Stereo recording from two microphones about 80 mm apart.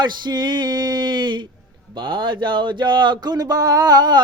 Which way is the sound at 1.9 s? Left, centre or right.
Right.